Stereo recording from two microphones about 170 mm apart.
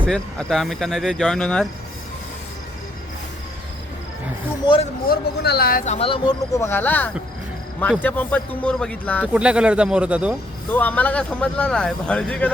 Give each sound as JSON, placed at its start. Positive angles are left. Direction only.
{"t": 0.1, "sound": "speech", "side_deg": 5}
{"t": 4.6, "sound": "speech", "side_deg": 30}
{"t": 5.0, "sound": "speech", "side_deg": 70}
{"t": 5.8, "sound": "speech", "side_deg": 35}
{"t": 6.5, "sound": "speech", "side_deg": 15}
{"t": 9.3, "sound": "speech", "side_deg": -5}
{"t": 10.7, "sound": "speech", "side_deg": 10}